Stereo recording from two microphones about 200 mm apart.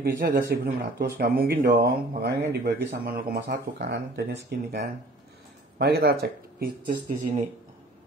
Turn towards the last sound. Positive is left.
turn(degrees=-50)  # may be behind; listen again after turning